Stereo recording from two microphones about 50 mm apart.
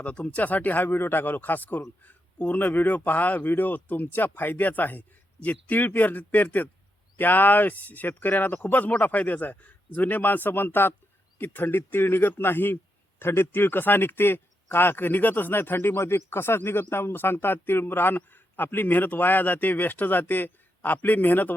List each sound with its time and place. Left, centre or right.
0.0 s a man's voice: left
16.0 s a man's voice: left